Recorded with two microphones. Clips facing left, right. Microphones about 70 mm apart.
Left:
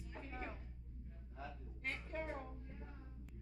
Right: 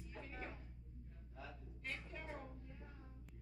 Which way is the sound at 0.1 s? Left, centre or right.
Left.